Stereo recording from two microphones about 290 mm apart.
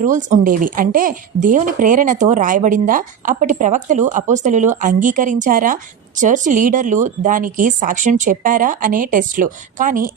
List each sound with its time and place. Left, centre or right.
0.0 s a woman's voice: right